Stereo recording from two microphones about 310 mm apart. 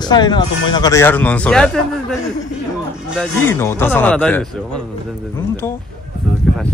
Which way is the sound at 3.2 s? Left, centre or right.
Centre.